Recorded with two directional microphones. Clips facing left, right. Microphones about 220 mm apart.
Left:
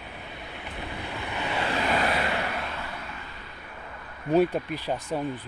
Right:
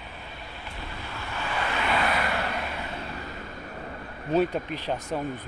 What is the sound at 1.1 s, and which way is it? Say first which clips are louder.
Vehicle: left 1 dB; 15° left (ahead or behind).